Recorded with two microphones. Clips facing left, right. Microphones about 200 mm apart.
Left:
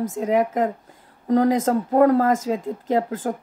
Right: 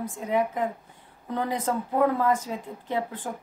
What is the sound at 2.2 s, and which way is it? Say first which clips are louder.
Speech: left 5 dB; 90° left.